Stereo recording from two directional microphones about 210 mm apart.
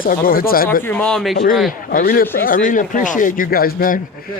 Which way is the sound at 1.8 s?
45° left (ahead or behind).